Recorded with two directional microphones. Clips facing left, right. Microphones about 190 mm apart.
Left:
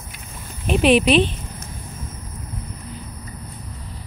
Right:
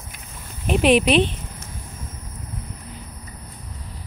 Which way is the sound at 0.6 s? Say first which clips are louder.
Left 1 dB; 15° right (ahead or behind).